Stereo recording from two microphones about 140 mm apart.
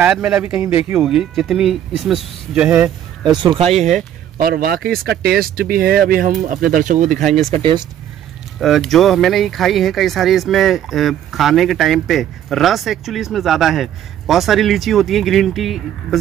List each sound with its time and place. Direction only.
0.0 s speech: 10° right (ahead or behind)
1.0 s speech: centre (ahead or behind)
3.7 s speech: centre (ahead or behind)
4.4 s speech: 90° right; by 7.2 s 60° right (ahead or behind)
7.5 s speech: 35° right (ahead or behind)
8.5 s speech: centre (ahead or behind)